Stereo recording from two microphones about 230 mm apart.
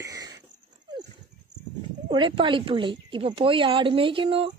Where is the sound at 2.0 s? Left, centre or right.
Right.